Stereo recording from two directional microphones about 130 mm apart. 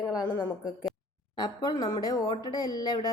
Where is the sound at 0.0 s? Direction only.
25° left (ahead or behind).